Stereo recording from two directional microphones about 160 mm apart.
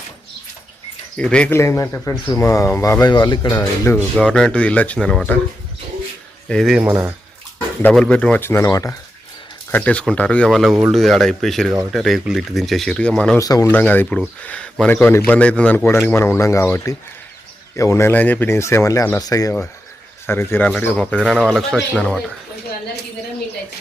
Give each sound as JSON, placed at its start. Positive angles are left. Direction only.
{"t": 1.1, "sound": "speech", "side_deg": 5}
{"t": 3.5, "sound": "speech", "side_deg": 15}
{"t": 6.5, "sound": "speech", "side_deg": 0}
{"t": 7.8, "sound": "speech", "side_deg": 5}
{"t": 9.7, "sound": "speech", "side_deg": 10}
{"t": 13.4, "sound": "speech", "side_deg": 20}